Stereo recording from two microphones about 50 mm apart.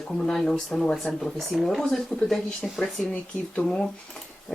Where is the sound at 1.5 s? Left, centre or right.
Centre.